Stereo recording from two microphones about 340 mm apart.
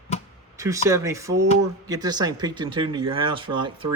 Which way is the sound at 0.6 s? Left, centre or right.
Centre.